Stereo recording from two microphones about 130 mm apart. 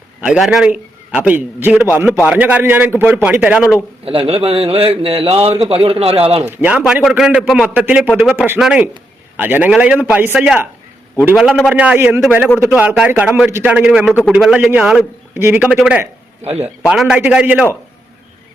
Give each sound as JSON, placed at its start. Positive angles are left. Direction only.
{"t": 0.2, "sound": "a man's voice", "side_deg": -5}
{"t": 4.0, "sound": "a man's voice", "side_deg": -45}
{"t": 6.6, "sound": "a man's voice", "side_deg": -10}
{"t": 16.4, "sound": "a man's voice", "side_deg": -50}
{"t": 16.8, "sound": "a man's voice", "side_deg": -5}